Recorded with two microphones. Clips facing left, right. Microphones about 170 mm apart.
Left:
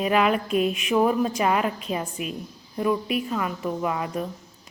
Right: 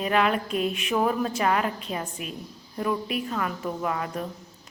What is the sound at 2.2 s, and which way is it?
Speech, 35° right (ahead or behind).